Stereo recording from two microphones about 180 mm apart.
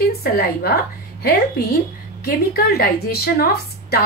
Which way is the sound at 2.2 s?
60° left (ahead or behind).